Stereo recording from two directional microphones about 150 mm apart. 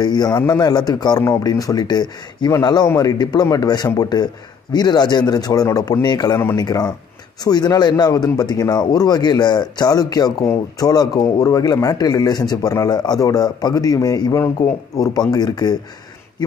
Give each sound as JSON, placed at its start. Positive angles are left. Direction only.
{"t": 0.0, "sound": "a man's voice", "side_deg": 25}